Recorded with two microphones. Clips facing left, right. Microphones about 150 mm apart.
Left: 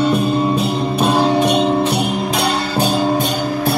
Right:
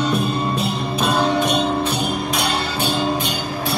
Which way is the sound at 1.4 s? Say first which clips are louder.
Left 5 dB; 70° left (ahead or behind).